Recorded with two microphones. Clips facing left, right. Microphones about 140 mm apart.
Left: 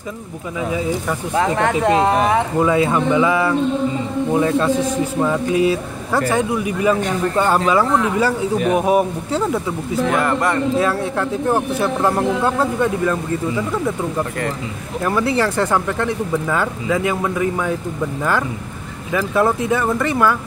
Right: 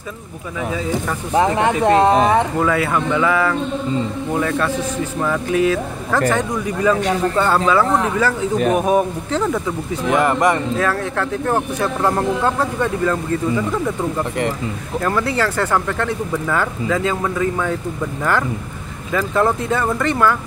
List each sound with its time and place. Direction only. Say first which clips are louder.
1.4 s speech: right 1 dB; 15° right (ahead or behind)
2.6 s speech: left 2 dB; 20° left (ahead or behind)
10.0 s speech: right 3 dB; 20° right (ahead or behind)
10.8 s speech: left 1 dB; 15° left (ahead or behind)
15.0 s speech: left 2 dB; 15° left (ahead or behind)
19.1 s speech: even; 10° left (ahead or behind)